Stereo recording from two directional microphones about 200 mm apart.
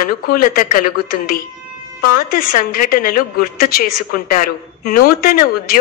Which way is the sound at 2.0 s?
45° left (ahead or behind).